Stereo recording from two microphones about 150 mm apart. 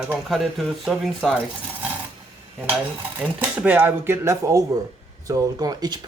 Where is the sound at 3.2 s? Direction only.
10° right (ahead or behind).